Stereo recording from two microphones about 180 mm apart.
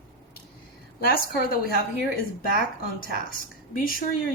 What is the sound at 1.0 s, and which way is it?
Speech, 55° left (ahead or behind).